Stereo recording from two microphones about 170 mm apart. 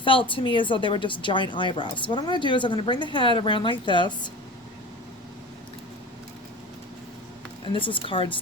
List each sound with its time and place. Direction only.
0.0 s a woman's voice: 30° left (ahead or behind)
7.7 s a woman's voice: 30° left (ahead or behind)